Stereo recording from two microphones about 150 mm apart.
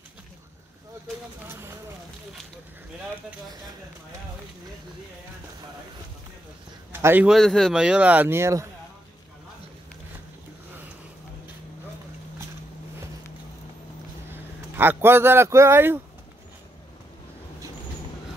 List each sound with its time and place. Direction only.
6.9 s a man's voice: 15° right (ahead or behind)
7.2 s speech: centre (ahead or behind); by 8.6 s 20° right (ahead or behind)
14.3 s a man's voice: 15° right (ahead or behind)